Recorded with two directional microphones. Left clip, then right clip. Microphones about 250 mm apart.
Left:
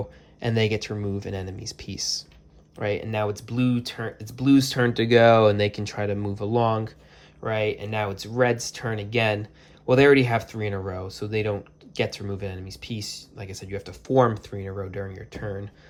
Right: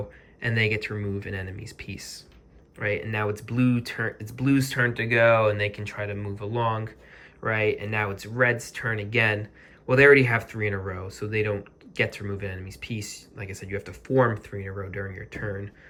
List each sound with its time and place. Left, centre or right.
0.3 s speech: centre